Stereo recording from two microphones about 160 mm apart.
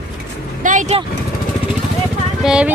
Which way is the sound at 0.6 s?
50° right (ahead or behind).